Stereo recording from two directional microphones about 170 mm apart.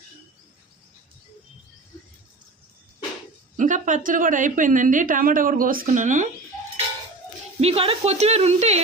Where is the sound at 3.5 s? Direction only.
45° right (ahead or behind).